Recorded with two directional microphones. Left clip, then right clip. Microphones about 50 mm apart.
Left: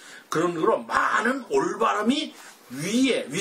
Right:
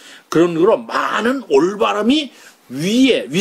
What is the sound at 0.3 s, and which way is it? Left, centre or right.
Speech, right.